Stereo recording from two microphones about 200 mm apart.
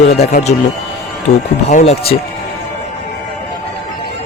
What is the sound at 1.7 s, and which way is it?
Speech, 30° left (ahead or behind).